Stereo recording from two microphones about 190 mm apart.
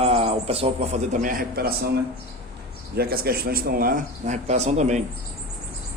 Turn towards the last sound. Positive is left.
turn(degrees=-35)  # may be behind; listen again after turning